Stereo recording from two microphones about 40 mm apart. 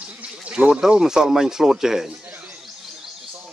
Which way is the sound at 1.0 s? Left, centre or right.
Centre.